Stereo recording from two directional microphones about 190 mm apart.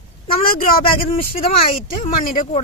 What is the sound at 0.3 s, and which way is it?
Speech, 50° left (ahead or behind).